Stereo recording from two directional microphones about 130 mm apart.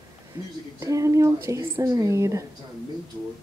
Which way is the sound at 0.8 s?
25° right (ahead or behind).